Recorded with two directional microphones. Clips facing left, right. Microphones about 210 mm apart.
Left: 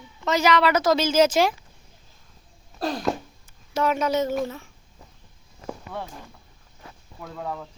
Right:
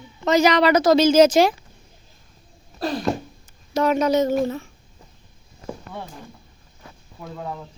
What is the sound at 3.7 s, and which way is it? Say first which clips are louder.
Speech: right 4 dB; 40° right (ahead or behind).